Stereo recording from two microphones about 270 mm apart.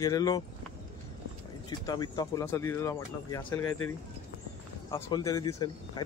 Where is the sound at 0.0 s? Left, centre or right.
Centre.